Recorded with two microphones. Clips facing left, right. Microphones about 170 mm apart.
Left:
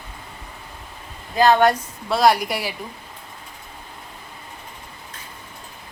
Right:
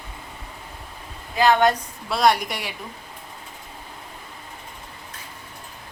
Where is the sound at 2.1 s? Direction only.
Centre (ahead or behind).